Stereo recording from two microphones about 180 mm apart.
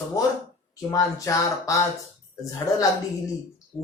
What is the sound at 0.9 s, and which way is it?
Speech, 20° left (ahead or behind).